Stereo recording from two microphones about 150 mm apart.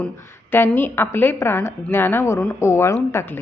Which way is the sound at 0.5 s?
15° left (ahead or behind).